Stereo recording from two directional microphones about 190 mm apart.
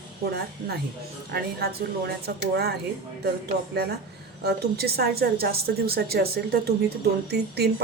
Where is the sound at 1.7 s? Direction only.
55° right (ahead or behind).